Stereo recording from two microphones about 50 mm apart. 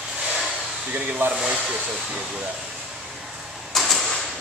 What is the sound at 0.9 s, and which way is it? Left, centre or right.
Speech, right.